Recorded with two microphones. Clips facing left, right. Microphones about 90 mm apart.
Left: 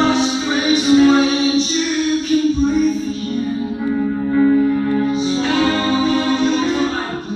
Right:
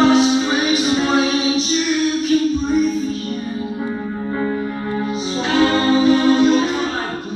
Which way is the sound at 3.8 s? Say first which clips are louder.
Left 5 dB; 20° right (ahead or behind).